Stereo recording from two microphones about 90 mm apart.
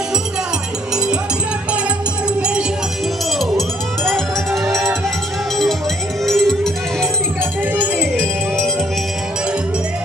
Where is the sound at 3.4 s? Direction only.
Centre (ahead or behind).